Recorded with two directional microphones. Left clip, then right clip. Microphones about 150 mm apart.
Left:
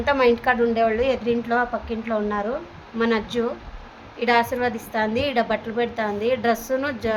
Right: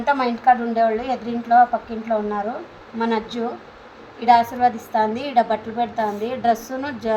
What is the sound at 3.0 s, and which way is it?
A woman's voice, 50° left (ahead or behind).